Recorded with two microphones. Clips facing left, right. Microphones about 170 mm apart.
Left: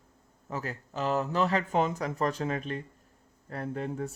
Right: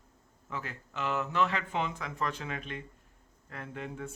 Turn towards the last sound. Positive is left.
turn(degrees=40)  # may be behind; listen again after turning